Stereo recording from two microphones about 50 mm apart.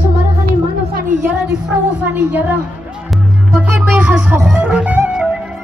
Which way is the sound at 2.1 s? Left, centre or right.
Right.